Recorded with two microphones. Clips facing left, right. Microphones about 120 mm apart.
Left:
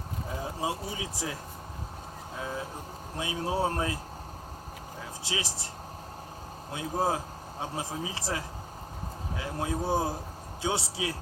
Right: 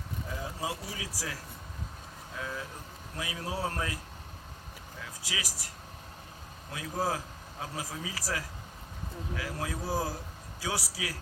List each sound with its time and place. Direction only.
0.3 s speech: 30° left (ahead or behind)
5.2 s speech: 25° left (ahead or behind)